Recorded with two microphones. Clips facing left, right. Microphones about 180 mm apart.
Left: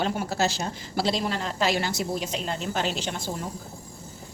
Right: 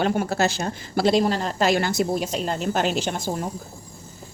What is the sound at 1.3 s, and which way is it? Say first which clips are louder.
A woman's voice: right 5 dB; 40° right (ahead or behind).